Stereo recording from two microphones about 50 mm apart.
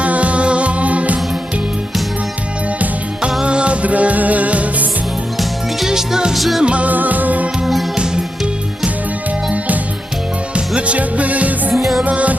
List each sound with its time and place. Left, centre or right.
0.0 s music: right
3.4 s music: right
5.4 s music: centre
6.3 s music: centre
6.6 s music: right
7.6 s music: centre
10.5 s music: right
11.7 s music: centre
12.0 s music: right